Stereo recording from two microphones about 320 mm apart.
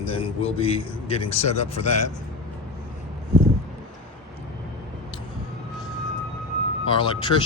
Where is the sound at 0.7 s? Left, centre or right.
Centre.